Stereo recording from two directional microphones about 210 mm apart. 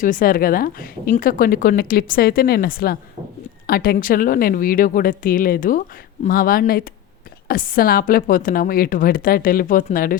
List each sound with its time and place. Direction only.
0.0 s a woman's voice: 40° left (ahead or behind)